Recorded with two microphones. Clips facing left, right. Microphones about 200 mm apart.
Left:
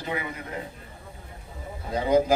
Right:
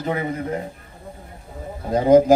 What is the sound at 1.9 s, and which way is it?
Speech, 45° right (ahead or behind).